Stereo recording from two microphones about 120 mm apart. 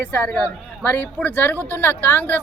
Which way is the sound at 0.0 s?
15° left (ahead or behind).